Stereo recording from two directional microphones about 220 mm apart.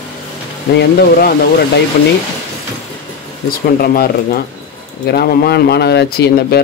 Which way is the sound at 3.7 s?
45° left (ahead or behind).